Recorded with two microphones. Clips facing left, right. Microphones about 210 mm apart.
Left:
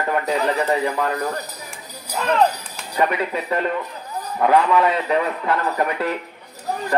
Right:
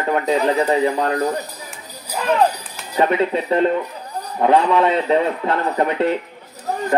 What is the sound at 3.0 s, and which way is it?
Speech, 30° right (ahead or behind).